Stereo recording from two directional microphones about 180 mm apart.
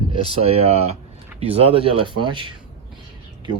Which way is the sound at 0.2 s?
30° right (ahead or behind).